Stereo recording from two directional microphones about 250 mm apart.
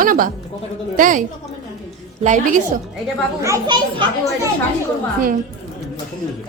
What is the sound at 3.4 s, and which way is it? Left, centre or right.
Speech, centre.